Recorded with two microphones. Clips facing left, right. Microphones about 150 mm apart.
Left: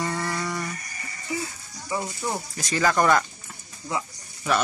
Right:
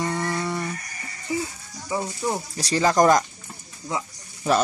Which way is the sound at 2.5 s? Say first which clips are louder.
Right 3 dB; 30° right (ahead or behind).